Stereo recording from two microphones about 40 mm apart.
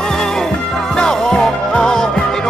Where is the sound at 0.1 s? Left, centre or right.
Centre.